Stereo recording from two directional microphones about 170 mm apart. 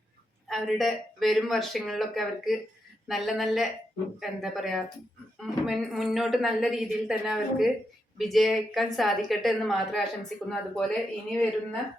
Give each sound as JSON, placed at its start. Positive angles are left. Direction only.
{"t": 0.4, "sound": "a woman's voice", "side_deg": 5}